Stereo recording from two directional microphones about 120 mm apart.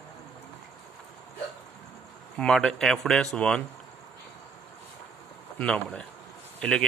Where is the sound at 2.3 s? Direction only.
5° left (ahead or behind).